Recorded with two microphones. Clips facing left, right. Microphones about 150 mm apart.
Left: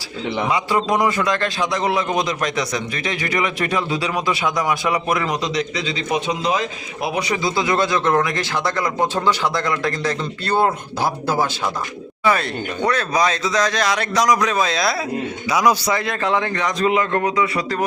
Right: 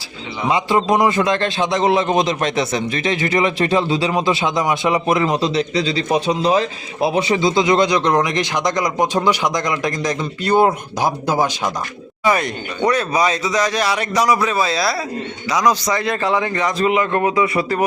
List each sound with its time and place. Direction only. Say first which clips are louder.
0.5 s a man's voice: right 5 dB; 25° right (ahead or behind); by 16.9 s 5° right (ahead or behind)
16.9 s a man's voice: right 2 dB; 15° right (ahead or behind)
17.6 s speech: right 4 dB; 10° right (ahead or behind)